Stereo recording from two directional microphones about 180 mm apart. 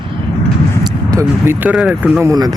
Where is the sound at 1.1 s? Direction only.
15° right (ahead or behind).